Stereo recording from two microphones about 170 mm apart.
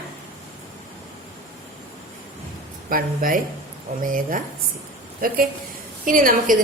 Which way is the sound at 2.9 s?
55° right (ahead or behind).